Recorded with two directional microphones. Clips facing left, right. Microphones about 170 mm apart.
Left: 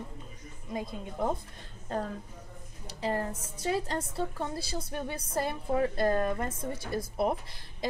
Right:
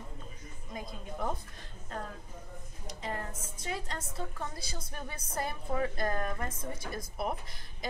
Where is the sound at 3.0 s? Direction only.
30° left (ahead or behind).